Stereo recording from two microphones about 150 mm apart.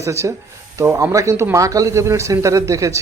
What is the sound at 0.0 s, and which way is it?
Speech, 20° right (ahead or behind).